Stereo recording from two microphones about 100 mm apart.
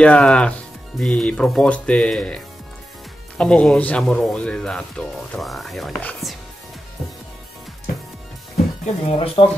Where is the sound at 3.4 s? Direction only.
10° left (ahead or behind).